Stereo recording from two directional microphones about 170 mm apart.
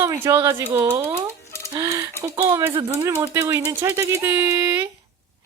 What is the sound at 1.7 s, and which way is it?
Music, 20° right (ahead or behind).